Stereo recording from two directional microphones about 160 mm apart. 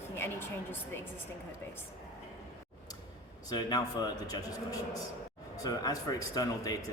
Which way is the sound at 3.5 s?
25° left (ahead or behind).